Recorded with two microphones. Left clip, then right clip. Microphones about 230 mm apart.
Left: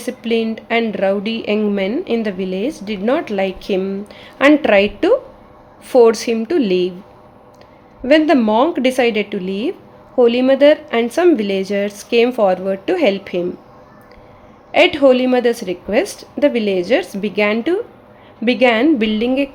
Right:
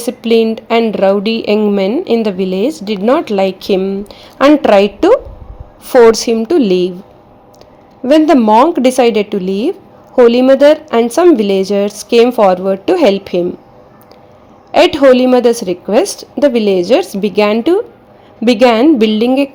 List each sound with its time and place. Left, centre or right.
0.0 s a woman's voice: right
8.0 s speech: centre
14.7 s speech: right